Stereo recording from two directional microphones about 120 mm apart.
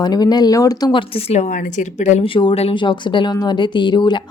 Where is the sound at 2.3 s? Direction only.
45° left (ahead or behind).